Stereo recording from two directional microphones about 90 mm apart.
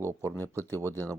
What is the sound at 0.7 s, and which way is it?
Speech, 35° right (ahead or behind).